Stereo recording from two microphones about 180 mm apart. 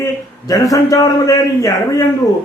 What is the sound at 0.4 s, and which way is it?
A man's voice, 20° left (ahead or behind).